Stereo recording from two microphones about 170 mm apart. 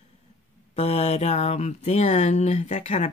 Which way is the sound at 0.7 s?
40° left (ahead or behind).